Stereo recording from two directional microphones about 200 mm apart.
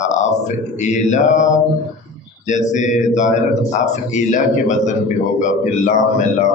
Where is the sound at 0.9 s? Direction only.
35° left (ahead or behind).